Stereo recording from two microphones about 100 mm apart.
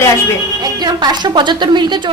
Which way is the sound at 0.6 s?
40° right (ahead or behind).